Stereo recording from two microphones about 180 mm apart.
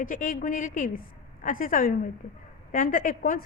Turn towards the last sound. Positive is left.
turn(degrees=50)  # may be behind; listen again after turning